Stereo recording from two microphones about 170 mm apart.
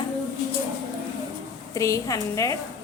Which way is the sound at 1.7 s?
20° left (ahead or behind).